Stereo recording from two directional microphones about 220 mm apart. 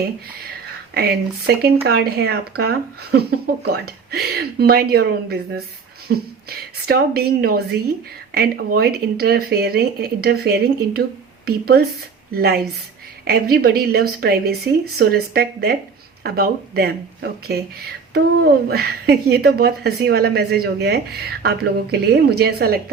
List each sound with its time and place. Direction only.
0.9 s speech: 45° right (ahead or behind)